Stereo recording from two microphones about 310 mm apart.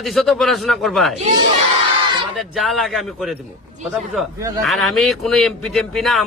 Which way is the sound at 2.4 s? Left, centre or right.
Centre.